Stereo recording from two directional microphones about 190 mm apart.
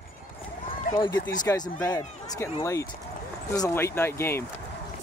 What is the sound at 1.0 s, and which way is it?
Speech, 20° left (ahead or behind).